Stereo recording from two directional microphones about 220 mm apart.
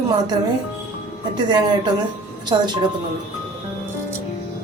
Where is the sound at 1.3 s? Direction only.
20° right (ahead or behind).